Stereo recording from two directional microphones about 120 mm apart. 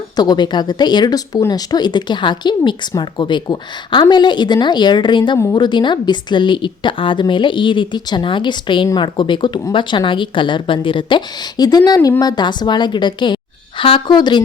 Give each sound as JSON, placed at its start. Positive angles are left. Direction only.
{"t": 0.2, "sound": "a woman's voice", "side_deg": 35}